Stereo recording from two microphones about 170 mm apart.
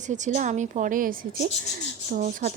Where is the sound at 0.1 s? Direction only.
45° right (ahead or behind).